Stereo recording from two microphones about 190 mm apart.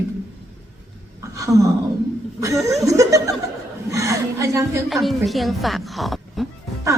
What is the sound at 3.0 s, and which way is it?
A woman's voice, 15° right (ahead or behind).